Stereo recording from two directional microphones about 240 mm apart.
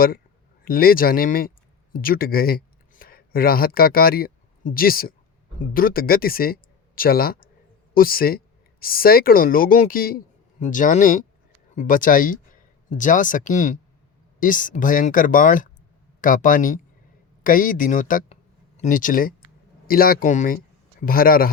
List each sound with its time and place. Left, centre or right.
0.6 s speech: left